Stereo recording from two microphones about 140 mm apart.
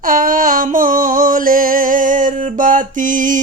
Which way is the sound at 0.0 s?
75° right (ahead or behind).